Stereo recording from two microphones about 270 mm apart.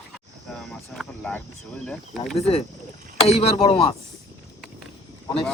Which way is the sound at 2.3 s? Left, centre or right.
Left.